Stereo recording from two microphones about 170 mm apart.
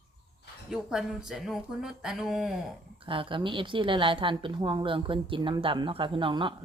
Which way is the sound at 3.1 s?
30° right (ahead or behind).